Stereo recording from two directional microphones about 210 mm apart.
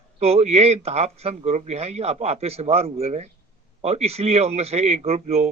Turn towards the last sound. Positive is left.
turn(degrees=-30)  # may be behind; listen again after turning